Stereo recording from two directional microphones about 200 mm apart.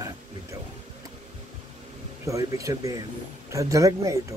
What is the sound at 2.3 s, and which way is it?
Speech, 15° right (ahead or behind).